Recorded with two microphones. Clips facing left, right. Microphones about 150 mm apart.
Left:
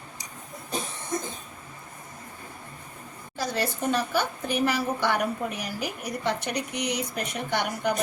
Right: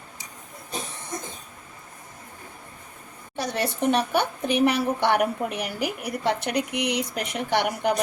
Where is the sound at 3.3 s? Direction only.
65° right (ahead or behind).